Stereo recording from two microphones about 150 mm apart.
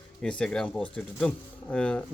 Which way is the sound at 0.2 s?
5° left (ahead or behind).